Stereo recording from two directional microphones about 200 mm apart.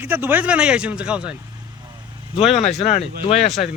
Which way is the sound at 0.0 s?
10° right (ahead or behind).